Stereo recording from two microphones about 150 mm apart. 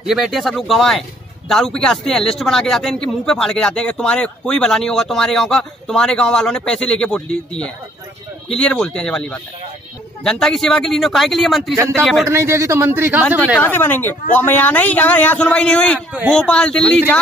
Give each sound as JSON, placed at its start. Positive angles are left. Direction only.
{"t": 0.0, "sound": "a man's voice", "side_deg": -5}
{"t": 11.7, "sound": "a man's voice", "side_deg": -15}
{"t": 13.6, "sound": "a man's voice", "side_deg": 15}